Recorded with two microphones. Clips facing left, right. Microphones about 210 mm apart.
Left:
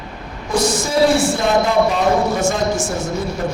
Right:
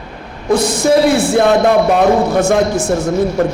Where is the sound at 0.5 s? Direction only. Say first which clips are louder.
Right 5 dB; 60° right (ahead or behind).